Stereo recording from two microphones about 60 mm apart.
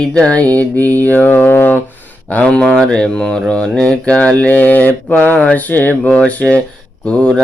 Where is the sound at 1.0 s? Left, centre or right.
Left.